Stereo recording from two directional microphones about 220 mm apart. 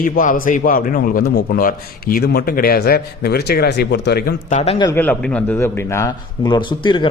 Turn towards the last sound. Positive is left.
turn(degrees=20)  # may be behind; listen again after turning